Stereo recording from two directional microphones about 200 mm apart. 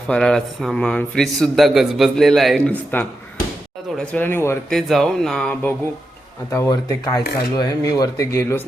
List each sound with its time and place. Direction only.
0.1 s a man's voice: 5° left (ahead or behind)
4.7 s a man's voice: centre (ahead or behind)
6.5 s speech: 15° left (ahead or behind)